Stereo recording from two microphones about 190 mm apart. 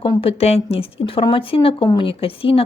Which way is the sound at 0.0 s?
25° left (ahead or behind).